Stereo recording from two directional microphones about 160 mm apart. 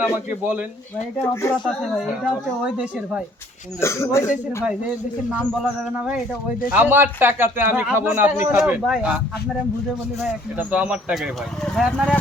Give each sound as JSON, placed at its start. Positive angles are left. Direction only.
{"t": 0.0, "sound": "speech", "side_deg": -10}
{"t": 1.2, "sound": "speech", "side_deg": 15}
{"t": 2.0, "sound": "speech", "side_deg": -5}
{"t": 3.8, "sound": "speech", "side_deg": 15}
{"t": 5.3, "sound": "speech", "side_deg": -5}
{"t": 6.7, "sound": "speech", "side_deg": -10}